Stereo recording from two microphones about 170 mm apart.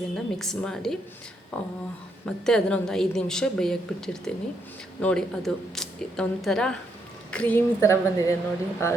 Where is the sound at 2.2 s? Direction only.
5° left (ahead or behind).